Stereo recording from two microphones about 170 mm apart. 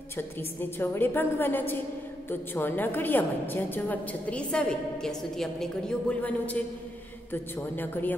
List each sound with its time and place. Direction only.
0.4 s a woman's voice: 10° left (ahead or behind)